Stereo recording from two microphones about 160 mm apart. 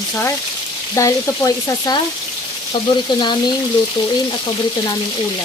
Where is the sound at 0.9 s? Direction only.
20° left (ahead or behind).